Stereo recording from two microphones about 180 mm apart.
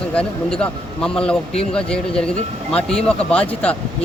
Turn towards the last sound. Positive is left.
turn(degrees=5)  # may be behind; listen again after turning